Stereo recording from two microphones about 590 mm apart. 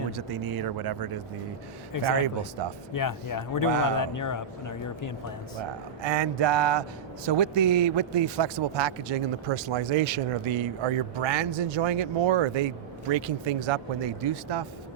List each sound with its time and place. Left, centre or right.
0.3 s speech: right
1.9 s a man's voice: left
6.0 s a man's voice: right